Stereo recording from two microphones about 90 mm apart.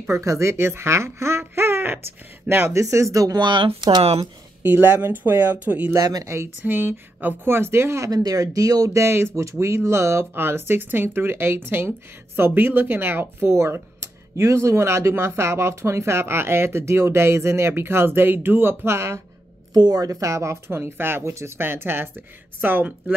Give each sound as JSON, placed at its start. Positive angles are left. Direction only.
{"t": 0.1, "sound": "speech", "side_deg": -35}
{"t": 1.4, "sound": "a sound", "side_deg": -25}
{"t": 2.4, "sound": "speech", "side_deg": -25}
{"t": 4.6, "sound": "speech", "side_deg": -25}
{"t": 5.9, "sound": "speech", "side_deg": -40}
{"t": 8.1, "sound": "speech", "side_deg": -45}
{"t": 19.7, "sound": "speech", "side_deg": -45}